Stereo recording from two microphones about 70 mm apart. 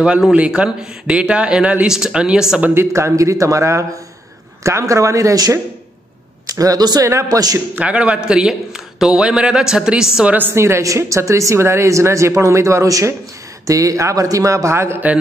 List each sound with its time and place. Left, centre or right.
0.4 s a man's voice: centre
2.7 s speech: right
6.5 s a man's voice: right
7.7 s a man's voice: centre
10.5 s speech: right